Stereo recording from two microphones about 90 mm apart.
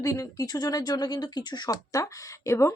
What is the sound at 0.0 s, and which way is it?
Speech, 40° left (ahead or behind).